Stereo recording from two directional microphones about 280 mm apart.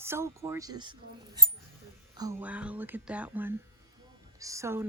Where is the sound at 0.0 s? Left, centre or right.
Centre.